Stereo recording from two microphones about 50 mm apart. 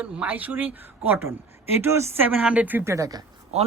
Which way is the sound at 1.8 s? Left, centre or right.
Right.